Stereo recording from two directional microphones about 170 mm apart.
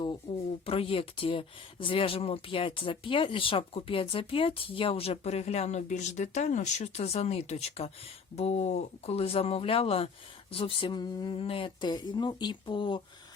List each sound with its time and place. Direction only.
0.6 s speech: 35° left (ahead or behind)